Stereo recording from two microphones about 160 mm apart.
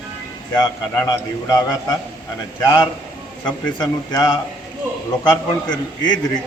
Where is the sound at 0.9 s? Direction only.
20° left (ahead or behind).